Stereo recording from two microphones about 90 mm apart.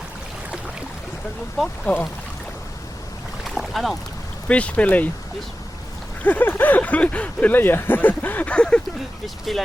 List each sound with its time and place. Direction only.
1.5 s speech: 5° left (ahead or behind)
3.5 s boat: centre (ahead or behind)
4.4 s speech: 15° left (ahead or behind)
6.2 s speech: 20° left (ahead or behind); by 9.6 s centre (ahead or behind)